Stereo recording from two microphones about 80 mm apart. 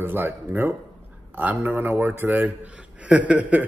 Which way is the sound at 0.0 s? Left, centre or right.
Right.